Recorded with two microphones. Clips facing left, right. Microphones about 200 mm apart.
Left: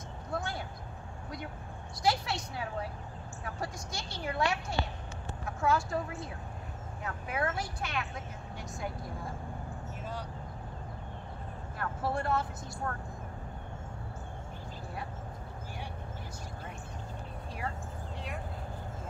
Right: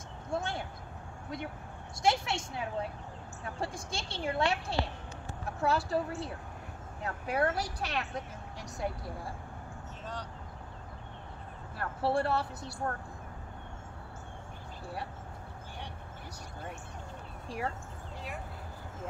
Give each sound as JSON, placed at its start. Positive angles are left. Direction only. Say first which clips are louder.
{"t": 0.3, "sound": "vehicle", "louder": "right 2 dB", "side_deg": -25}
{"t": 2.0, "sound": "a woman's voice", "louder": "right 1 dB", "side_deg": -25}
{"t": 11.8, "sound": "a woman's voice", "louder": "right 3 dB", "side_deg": -35}